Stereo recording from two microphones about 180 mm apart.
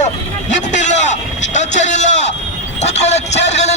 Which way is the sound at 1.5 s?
40° left (ahead or behind).